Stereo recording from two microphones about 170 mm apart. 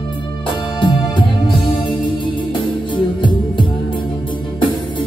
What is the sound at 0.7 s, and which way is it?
Music, 30° left (ahead or behind).